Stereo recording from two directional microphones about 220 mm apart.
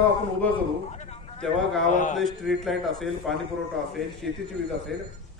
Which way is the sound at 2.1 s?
Centre (ahead or behind).